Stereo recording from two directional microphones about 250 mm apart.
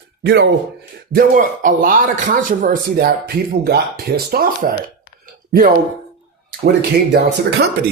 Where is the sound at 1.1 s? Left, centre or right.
Right.